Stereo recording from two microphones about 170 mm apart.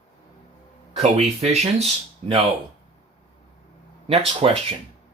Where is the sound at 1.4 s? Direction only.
40° right (ahead or behind).